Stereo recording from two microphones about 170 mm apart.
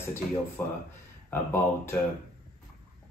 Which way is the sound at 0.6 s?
15° left (ahead or behind).